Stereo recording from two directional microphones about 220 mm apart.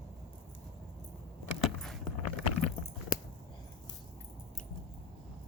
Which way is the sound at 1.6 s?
Centre (ahead or behind).